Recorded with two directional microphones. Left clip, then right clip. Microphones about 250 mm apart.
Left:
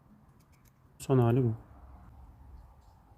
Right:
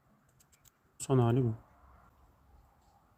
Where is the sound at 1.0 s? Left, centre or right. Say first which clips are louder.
Left 2 dB; centre.